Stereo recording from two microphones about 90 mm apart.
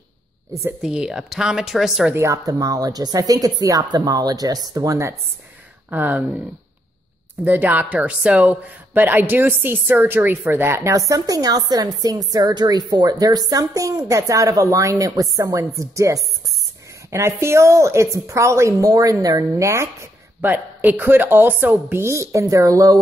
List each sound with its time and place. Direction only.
0.8 s a woman's voice: 5° right (ahead or behind)
2.1 s speech: 35° right (ahead or behind)
5.9 s speech: 15° right (ahead or behind)
7.4 s speech: 20° right (ahead or behind); by 22.9 s 40° right (ahead or behind)